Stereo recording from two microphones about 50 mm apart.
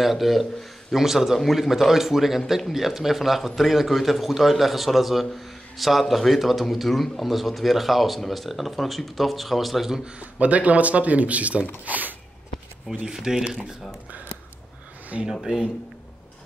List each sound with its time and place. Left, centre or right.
0.0 s a man's voice: centre
10.4 s speech: right
13.0 s speech: centre
15.1 s speech: centre